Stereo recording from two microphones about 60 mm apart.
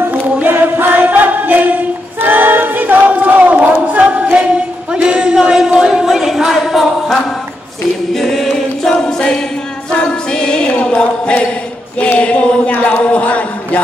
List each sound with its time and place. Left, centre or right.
0.1 s a capella: right; by 9.4 s centre
9.9 s choir: centre
12.2 s a sound: centre